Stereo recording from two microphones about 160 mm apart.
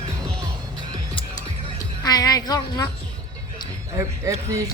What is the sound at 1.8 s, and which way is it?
A woman's voice, 25° left (ahead or behind).